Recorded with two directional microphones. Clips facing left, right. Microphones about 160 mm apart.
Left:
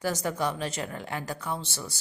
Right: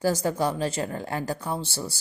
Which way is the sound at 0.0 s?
30° right (ahead or behind).